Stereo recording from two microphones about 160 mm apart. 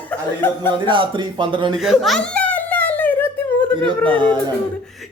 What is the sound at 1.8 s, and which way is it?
Giggle, centre (ahead or behind).